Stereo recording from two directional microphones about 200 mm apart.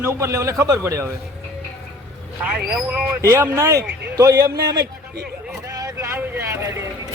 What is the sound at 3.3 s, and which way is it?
A man's voice, 10° right (ahead or behind).